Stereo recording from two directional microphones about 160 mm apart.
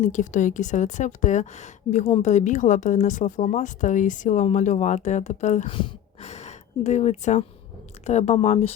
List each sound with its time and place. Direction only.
0.0 s speech: 50° left (ahead or behind)
5.6 s speech: 30° left (ahead or behind)